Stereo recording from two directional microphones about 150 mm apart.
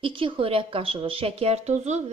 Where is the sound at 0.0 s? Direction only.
35° right (ahead or behind).